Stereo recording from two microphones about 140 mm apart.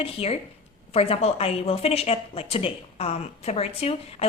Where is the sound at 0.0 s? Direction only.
45° left (ahead or behind).